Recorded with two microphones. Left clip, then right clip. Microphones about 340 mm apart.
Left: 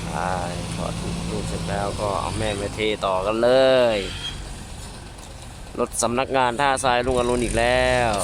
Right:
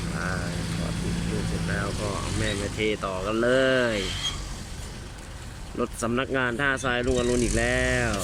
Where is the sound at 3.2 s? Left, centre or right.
Left.